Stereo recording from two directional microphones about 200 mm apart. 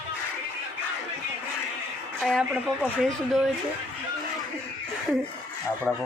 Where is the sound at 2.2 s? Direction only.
Centre (ahead or behind).